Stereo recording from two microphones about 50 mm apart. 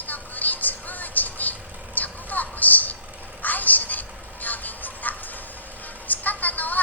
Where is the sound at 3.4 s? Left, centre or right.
Left.